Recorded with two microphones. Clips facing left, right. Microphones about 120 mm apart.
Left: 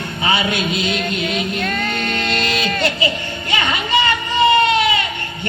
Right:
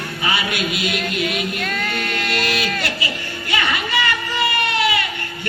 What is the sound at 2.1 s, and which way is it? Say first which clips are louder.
Music: even; 20° left (ahead or behind).